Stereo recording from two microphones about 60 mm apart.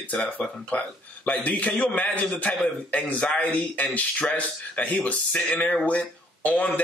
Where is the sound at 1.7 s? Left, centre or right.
Centre.